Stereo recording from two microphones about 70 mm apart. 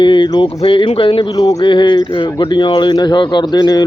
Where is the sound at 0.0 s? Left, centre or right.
Left.